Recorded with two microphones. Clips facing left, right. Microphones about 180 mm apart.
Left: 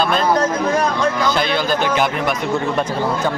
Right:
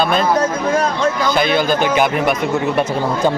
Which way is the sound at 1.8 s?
5° right (ahead or behind).